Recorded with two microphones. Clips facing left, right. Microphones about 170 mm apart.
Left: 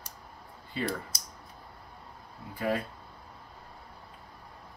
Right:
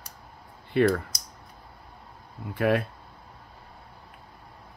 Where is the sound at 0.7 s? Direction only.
65° right (ahead or behind).